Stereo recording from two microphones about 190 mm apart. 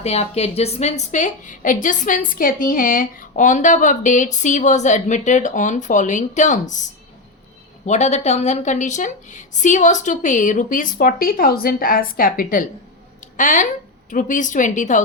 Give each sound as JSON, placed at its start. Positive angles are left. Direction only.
{"t": 0.0, "sound": "a woman's voice", "side_deg": 35}
{"t": 7.9, "sound": "a woman's voice", "side_deg": 35}